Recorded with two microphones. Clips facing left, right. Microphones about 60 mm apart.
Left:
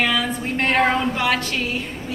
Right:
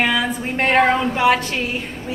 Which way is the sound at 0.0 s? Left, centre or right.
Centre.